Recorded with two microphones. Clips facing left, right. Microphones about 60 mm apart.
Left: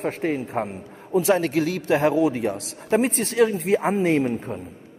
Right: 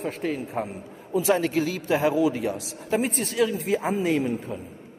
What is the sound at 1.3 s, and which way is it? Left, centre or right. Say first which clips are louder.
A man's voice: left 2 dB; left.